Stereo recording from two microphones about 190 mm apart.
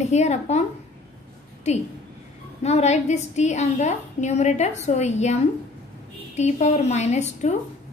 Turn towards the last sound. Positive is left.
turn(degrees=35)  # may be behind; listen again after turning